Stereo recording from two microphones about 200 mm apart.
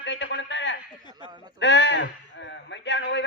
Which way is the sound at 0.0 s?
60° left (ahead or behind).